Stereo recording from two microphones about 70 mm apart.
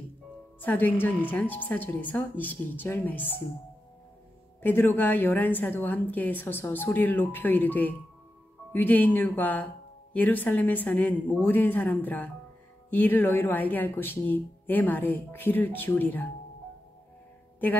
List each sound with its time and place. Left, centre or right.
0.6 s speech: left
4.6 s speech: left